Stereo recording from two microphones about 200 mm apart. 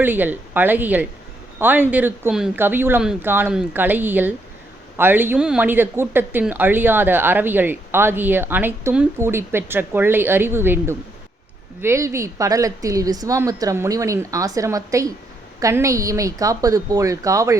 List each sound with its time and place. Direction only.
0.0 s speech: 10° right (ahead or behind)